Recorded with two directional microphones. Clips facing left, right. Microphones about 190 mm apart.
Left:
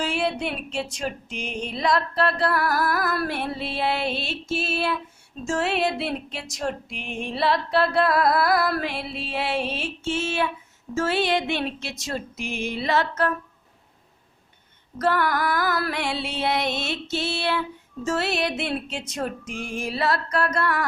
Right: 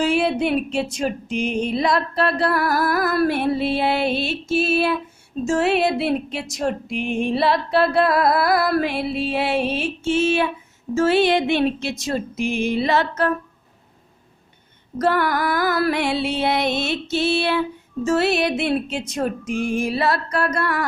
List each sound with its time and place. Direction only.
0.0 s music: 10° right (ahead or behind)
15.0 s music: 15° right (ahead or behind)